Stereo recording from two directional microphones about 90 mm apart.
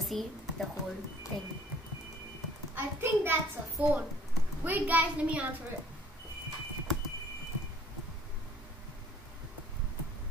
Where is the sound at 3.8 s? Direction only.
15° right (ahead or behind).